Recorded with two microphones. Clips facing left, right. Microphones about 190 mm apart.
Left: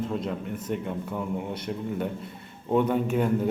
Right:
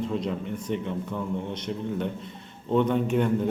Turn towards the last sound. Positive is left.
turn(degrees=5)  # may be behind; listen again after turning